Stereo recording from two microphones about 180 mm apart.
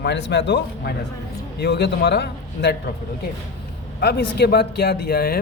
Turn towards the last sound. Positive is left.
turn(degrees=60)  # may be behind; listen again after turning